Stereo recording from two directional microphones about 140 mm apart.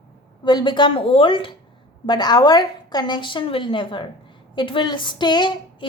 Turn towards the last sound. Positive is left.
turn(degrees=35)  # may be behind; listen again after turning